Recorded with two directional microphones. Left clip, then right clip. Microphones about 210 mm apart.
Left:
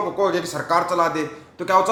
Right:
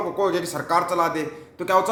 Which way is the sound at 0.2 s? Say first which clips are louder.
Left 1 dB; 5° right (ahead or behind).